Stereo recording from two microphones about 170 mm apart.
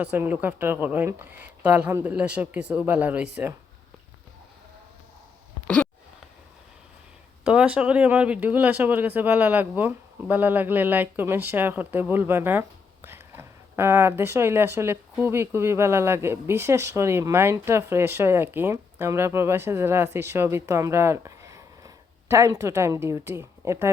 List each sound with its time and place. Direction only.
0.0 s speech: 10° right (ahead or behind)
5.6 s a sound: 5° left (ahead or behind)
7.4 s speech: 5° right (ahead or behind)